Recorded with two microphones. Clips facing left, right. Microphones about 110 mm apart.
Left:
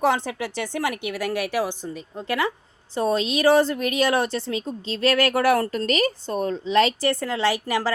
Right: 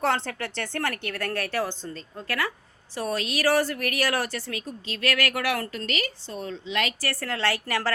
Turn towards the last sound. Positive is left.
turn(degrees=15)  # may be behind; listen again after turning